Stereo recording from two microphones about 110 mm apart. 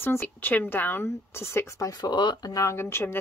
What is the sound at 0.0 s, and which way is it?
A woman's voice, 20° left (ahead or behind).